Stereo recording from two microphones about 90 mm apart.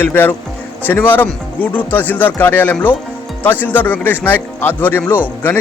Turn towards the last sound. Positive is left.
turn(degrees=20)  # may be behind; listen again after turning